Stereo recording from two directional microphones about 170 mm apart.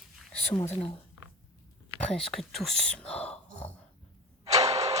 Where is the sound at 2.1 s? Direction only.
Centre (ahead or behind).